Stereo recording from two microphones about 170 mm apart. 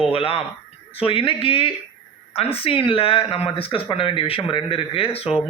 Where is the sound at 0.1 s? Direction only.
30° left (ahead or behind).